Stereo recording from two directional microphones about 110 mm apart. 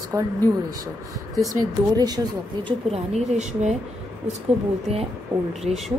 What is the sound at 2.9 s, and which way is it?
Speech, 90° right.